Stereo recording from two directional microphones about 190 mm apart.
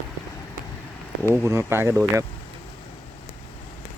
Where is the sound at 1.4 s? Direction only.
15° right (ahead or behind).